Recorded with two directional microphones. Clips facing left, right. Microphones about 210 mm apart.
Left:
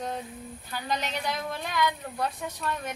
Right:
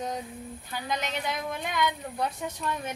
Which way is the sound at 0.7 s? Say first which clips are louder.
Left 1 dB; 15° right (ahead or behind).